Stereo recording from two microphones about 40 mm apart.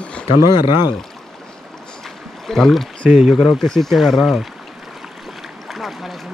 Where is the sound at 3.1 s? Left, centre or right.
Centre.